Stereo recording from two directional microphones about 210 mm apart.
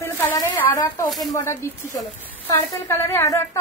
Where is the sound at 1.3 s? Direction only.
10° left (ahead or behind).